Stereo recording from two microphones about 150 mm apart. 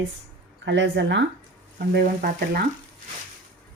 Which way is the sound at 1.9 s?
80° right.